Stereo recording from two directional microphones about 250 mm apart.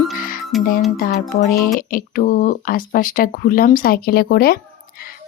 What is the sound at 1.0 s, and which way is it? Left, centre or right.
Speech, left.